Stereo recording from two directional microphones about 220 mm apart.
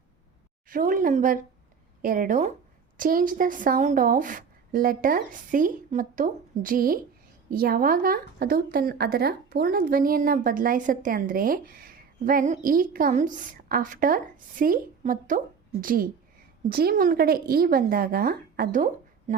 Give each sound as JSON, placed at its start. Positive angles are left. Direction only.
{"t": 0.7, "sound": "speech", "side_deg": -40}